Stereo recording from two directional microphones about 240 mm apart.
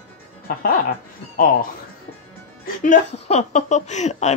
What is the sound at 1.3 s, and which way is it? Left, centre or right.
Speech, left.